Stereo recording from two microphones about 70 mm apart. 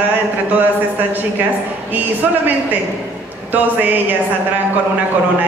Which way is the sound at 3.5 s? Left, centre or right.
Right.